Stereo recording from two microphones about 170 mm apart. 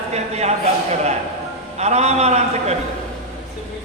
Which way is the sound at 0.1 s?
40° right (ahead or behind).